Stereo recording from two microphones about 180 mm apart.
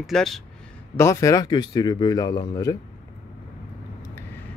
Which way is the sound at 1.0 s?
15° left (ahead or behind).